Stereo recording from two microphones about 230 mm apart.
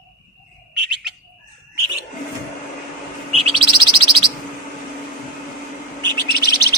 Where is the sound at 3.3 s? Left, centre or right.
Right.